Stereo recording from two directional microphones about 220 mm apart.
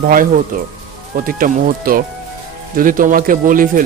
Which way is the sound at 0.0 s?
40° right (ahead or behind).